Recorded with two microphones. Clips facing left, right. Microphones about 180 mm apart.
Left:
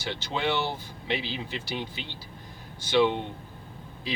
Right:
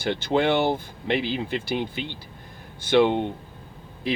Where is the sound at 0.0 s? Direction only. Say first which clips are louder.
Right 8 dB; 55° right (ahead or behind).